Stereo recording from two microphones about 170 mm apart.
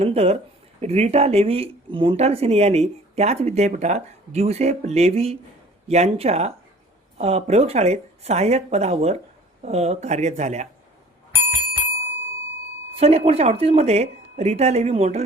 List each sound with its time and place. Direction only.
0.0 s speech: 35° right (ahead or behind)
13.0 s speech: 35° right (ahead or behind)